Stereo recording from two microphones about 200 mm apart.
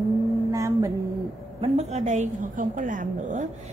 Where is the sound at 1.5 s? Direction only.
30° right (ahead or behind).